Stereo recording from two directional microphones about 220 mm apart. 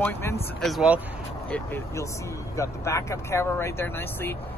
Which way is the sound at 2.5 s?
15° left (ahead or behind).